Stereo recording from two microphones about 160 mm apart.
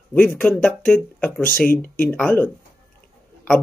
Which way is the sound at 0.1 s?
10° left (ahead or behind).